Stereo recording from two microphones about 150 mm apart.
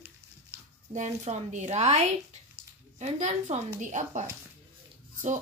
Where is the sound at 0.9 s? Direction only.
50° right (ahead or behind).